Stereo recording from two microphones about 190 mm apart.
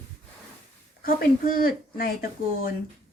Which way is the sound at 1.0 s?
50° left (ahead or behind).